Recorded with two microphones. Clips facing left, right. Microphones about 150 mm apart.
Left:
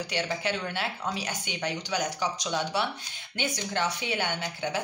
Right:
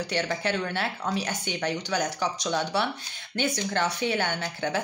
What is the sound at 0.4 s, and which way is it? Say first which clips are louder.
Speech: right 3 dB; 15° left (ahead or behind).